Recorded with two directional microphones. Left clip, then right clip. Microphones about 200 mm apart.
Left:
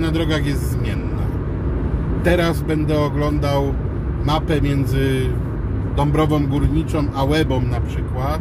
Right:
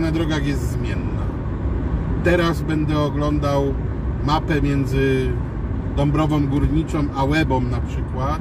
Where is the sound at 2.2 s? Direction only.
20° left (ahead or behind).